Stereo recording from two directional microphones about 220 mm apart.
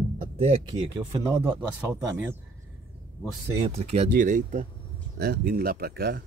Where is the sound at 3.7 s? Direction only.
30° right (ahead or behind); by 6.2 s 45° right (ahead or behind).